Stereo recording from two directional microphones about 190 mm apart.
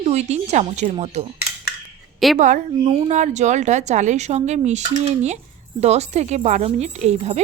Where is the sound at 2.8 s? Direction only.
35° right (ahead or behind).